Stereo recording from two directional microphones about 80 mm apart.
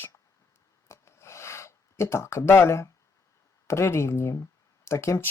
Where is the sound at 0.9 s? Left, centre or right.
Left.